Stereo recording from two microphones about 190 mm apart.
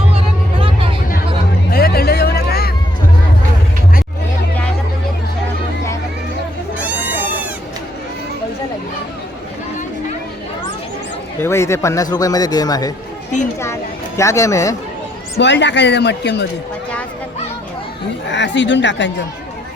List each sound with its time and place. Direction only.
1.7 s a sound: 55° left (ahead or behind)
6.7 s goat: 10° right (ahead or behind)
11.3 s a man's voice: 15° left (ahead or behind)
14.2 s speech: 15° left (ahead or behind)
15.4 s speech: 70° left (ahead or behind)
18.3 s speech: 70° left (ahead or behind)